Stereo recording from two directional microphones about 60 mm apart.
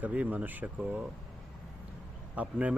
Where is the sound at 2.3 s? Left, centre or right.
Right.